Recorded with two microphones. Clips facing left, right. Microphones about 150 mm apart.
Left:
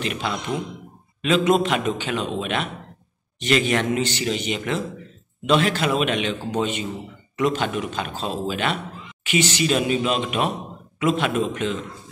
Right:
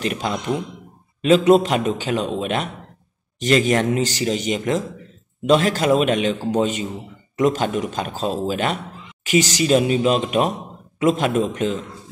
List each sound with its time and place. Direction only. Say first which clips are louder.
0.0 s a man's voice: right 3 dB; 40° right (ahead or behind)